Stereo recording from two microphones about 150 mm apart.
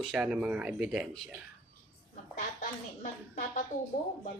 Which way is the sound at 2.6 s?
55° left (ahead or behind).